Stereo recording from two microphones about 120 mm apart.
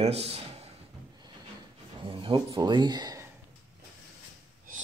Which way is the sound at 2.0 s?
45° right (ahead or behind).